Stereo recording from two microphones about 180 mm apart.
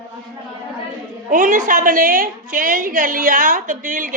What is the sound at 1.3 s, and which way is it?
A woman's voice, 50° right (ahead or behind).